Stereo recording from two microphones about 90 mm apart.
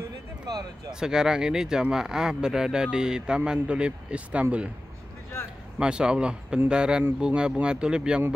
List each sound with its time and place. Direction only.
0.5 s speech: 45° right (ahead or behind)
0.9 s speech: 5° right (ahead or behind)
5.8 s speech: 10° right (ahead or behind)